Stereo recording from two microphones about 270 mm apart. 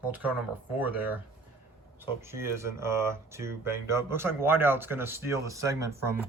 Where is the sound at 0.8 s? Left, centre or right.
Centre.